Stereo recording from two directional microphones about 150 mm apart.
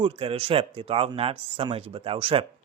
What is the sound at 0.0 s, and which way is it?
Speech, 40° right (ahead or behind).